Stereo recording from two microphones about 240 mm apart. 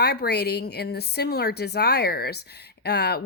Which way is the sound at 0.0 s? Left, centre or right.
Left.